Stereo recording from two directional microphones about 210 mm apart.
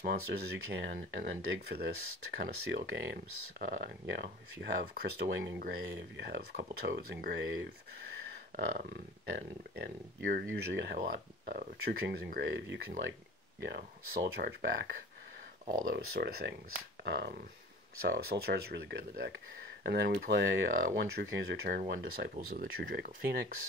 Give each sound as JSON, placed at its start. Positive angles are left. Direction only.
{"t": 0.0, "sound": "speech", "side_deg": -50}
{"t": 2.9, "sound": "speech", "side_deg": -60}
{"t": 3.6, "sound": "speech", "side_deg": -40}
{"t": 4.1, "sound": "speech", "side_deg": -55}
{"t": 7.0, "sound": "speech", "side_deg": -45}
{"t": 9.8, "sound": "speech", "side_deg": -45}
{"t": 10.4, "sound": "speech", "side_deg": -55}